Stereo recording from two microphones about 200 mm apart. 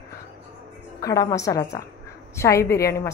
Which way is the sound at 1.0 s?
15° left (ahead or behind).